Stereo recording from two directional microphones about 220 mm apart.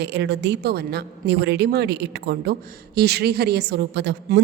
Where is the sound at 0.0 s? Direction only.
50° right (ahead or behind).